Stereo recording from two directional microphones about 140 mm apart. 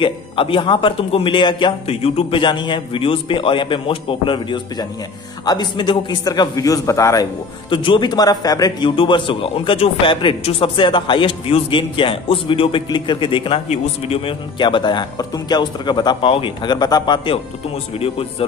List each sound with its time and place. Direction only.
0.0 s a man's voice: 40° left (ahead or behind); by 7.2 s 20° left (ahead or behind)
7.7 s a man's voice: 35° left (ahead or behind)